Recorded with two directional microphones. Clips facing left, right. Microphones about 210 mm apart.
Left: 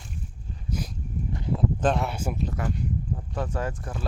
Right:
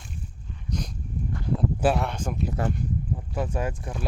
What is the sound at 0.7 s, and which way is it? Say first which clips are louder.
Dog: even; 5° left (ahead or behind).